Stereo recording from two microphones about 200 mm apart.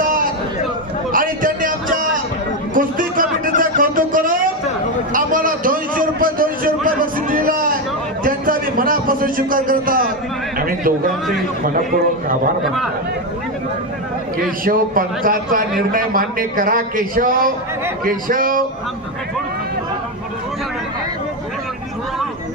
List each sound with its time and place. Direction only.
1.1 s a sound: 45° right (ahead or behind)
10.7 s speech: 45° right (ahead or behind)
12.6 s a man's voice: centre (ahead or behind)
14.6 s speech: 45° right (ahead or behind)